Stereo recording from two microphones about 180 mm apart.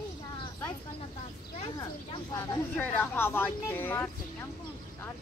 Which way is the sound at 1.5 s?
25° left (ahead or behind).